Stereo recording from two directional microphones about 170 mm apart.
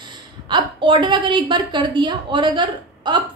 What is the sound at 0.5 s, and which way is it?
A woman's voice, 30° right (ahead or behind).